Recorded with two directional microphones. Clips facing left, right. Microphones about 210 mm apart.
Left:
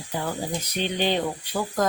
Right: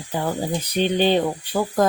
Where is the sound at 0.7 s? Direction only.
35° right (ahead or behind).